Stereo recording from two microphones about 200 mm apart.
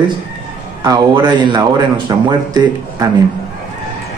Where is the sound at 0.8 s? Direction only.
20° right (ahead or behind).